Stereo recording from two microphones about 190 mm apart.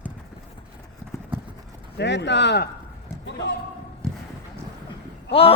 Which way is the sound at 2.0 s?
65° left (ahead or behind).